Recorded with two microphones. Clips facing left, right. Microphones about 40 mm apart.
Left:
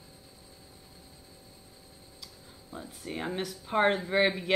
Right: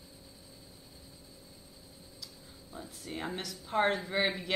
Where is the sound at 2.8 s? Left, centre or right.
Centre.